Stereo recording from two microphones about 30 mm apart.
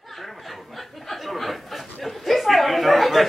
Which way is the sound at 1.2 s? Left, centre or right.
Centre.